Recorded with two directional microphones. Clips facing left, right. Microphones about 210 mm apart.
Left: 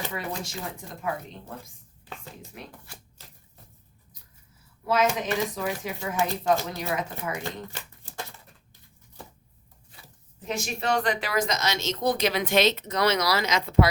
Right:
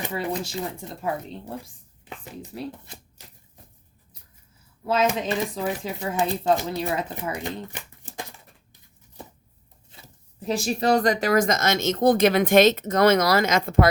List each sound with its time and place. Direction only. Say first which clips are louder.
0.1 s speech: right 5 dB; 30° right (ahead or behind)
2.0 s speech: right 4 dB; 15° right (ahead or behind)
2.8 s typewriter: right 3 dB; 20° right (ahead or behind)
4.9 s speech: right 2 dB; 30° right (ahead or behind)
7.4 s shuffling cards: right 3 dB; 15° right (ahead or behind)
10.4 s speech: right 6 dB; 35° right (ahead or behind); by 13.8 s 50° right (ahead or behind)